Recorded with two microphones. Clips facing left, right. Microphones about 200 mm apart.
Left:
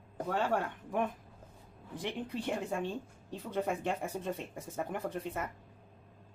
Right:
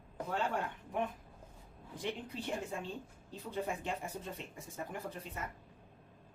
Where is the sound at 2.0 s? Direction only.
60° left (ahead or behind).